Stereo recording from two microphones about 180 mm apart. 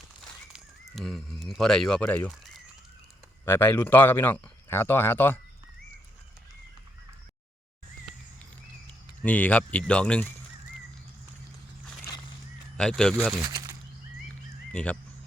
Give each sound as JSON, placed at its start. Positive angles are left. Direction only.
{"t": 0.5, "sound": "speech", "side_deg": 0}
{"t": 9.2, "sound": "speech", "side_deg": 10}
{"t": 12.7, "sound": "speech", "side_deg": 5}
{"t": 13.4, "sound": "a sound", "side_deg": -20}
{"t": 14.7, "sound": "speech", "side_deg": 5}